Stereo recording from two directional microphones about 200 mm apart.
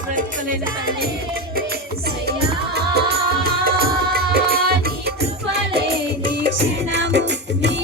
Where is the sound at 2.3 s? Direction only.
55° right (ahead or behind).